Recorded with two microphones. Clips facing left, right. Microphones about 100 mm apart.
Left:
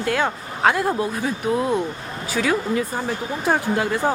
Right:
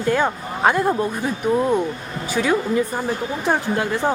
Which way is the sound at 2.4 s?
10° right (ahead or behind).